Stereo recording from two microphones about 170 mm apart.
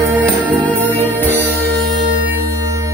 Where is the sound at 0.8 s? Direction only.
10° left (ahead or behind).